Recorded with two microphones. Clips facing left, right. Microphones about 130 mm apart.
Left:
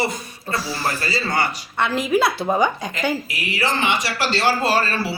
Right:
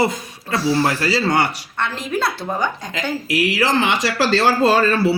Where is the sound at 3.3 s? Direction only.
90° right.